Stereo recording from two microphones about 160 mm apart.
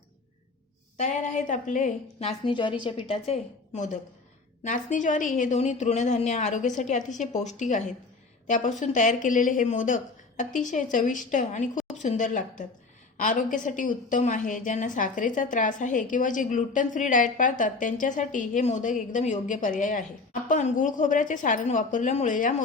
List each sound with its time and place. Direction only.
0.9 s a woman's voice: 50° left (ahead or behind)